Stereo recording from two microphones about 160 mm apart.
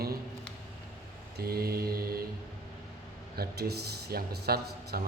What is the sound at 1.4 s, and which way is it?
Speech, 70° right (ahead or behind).